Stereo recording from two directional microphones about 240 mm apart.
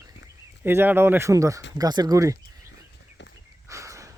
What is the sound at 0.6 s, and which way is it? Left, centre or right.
Speech, centre.